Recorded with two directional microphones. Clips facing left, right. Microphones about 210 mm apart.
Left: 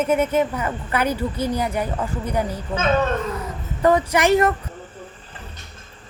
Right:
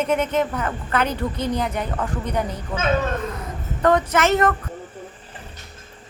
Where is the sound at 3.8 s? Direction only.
10° left (ahead or behind).